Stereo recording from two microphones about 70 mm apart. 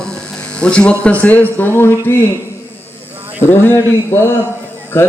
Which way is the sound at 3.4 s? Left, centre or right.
Left.